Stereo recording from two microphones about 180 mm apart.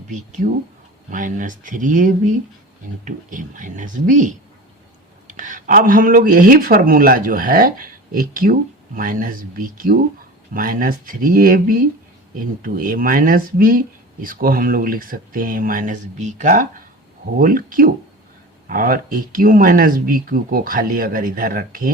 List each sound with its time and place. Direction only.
0.1 s speech: 45° right (ahead or behind)